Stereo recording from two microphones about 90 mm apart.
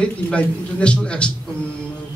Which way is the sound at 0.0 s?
10° left (ahead or behind).